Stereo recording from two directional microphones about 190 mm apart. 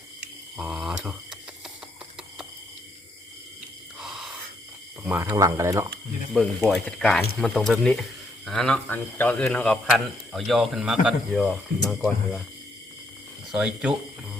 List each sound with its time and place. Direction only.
0.5 s speech: 5° right (ahead or behind)
4.0 s gasp: 5° right (ahead or behind)
5.0 s speech: 10° right (ahead or behind)
6.3 s speech: centre (ahead or behind)
13.5 s speech: 5° right (ahead or behind)